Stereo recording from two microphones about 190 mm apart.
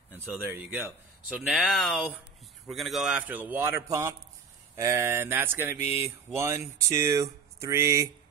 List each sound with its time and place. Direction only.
0.5 s speech: 10° right (ahead or behind)